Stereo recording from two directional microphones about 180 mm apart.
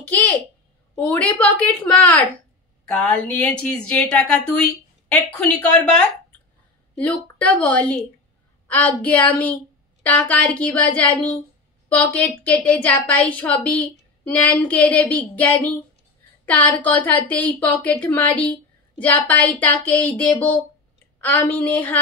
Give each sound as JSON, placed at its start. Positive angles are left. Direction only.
{"t": 0.1, "sound": "a sound", "side_deg": 10}
{"t": 0.9, "sound": "a woman's voice", "side_deg": 10}
{"t": 7.0, "sound": "a woman's voice", "side_deg": 10}